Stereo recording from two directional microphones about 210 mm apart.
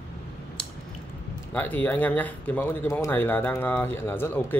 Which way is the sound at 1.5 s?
10° left (ahead or behind).